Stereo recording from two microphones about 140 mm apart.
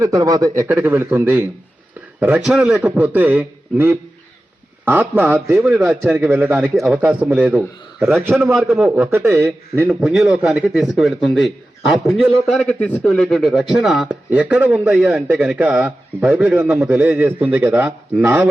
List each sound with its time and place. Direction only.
0.0 s a man's voice: 25° right (ahead or behind)
8.7 s a man's voice: 5° right (ahead or behind)
9.0 s a man's voice: 20° right (ahead or behind)